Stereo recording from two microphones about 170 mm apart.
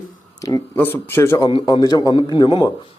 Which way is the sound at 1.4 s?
30° left (ahead or behind).